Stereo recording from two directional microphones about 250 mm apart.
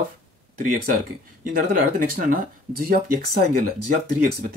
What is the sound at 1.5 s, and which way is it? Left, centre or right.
Speech, right.